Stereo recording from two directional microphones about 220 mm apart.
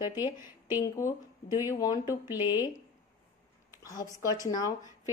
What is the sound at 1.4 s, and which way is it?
Speech, 45° left (ahead or behind).